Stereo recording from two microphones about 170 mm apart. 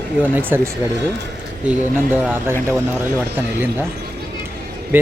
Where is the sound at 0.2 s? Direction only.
10° right (ahead or behind).